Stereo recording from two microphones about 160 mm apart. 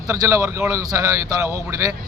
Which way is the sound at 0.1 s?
20° right (ahead or behind).